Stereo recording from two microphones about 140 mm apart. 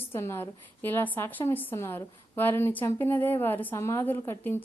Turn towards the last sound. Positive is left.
turn(degrees=15)  # may be behind; listen again after turning